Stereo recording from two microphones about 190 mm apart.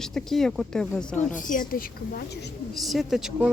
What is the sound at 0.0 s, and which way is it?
Speech, centre (ahead or behind).